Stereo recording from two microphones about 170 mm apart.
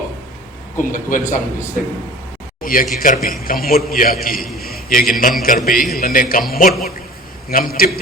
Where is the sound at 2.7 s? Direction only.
55° left (ahead or behind).